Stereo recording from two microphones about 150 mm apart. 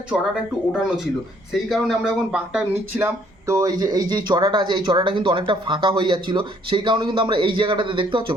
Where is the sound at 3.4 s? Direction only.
25° right (ahead or behind).